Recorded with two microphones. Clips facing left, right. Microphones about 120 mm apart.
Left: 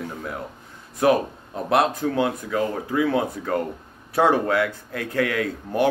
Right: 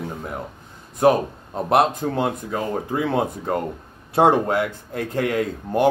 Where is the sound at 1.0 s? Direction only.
30° right (ahead or behind).